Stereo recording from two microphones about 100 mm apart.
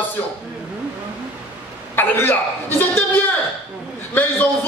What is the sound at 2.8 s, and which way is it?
Music, 20° left (ahead or behind).